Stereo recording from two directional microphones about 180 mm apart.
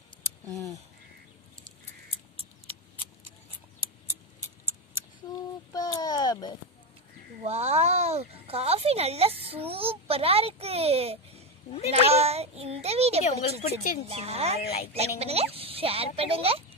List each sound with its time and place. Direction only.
2.3 s scissors: 30° right (ahead or behind)
5.7 s a sound: 20° left (ahead or behind)
7.4 s a sound: 35° right (ahead or behind)
12.1 s a child's voice: 35° right (ahead or behind)
13.2 s speech: 35° left (ahead or behind)
14.0 s a woman's voice: 35° right (ahead or behind)